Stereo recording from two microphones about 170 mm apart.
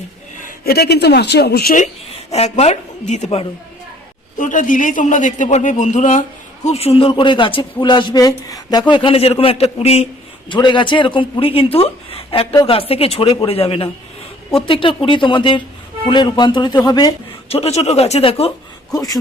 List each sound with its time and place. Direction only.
0.3 s a woman's voice: 60° left (ahead or behind)
2.3 s speech: 40° left (ahead or behind)
4.4 s a man's voice: 50° left (ahead or behind)
10.5 s speech: 30° left (ahead or behind)
17.5 s speech: 40° left (ahead or behind)
18.9 s speech: 20° left (ahead or behind)